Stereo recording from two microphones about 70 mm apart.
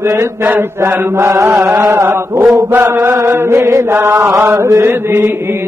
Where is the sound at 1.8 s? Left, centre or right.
Right.